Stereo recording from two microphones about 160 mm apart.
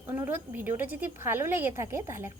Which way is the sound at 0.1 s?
15° right (ahead or behind).